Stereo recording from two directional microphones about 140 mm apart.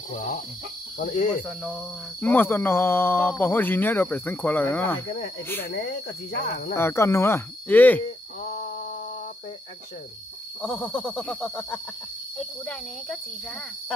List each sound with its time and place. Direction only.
0.1 s cricket: 70° left (ahead or behind)
2.2 s speech: 15° left (ahead or behind)
6.7 s speech: 20° left (ahead or behind)
10.6 s a sound: 5° left (ahead or behind)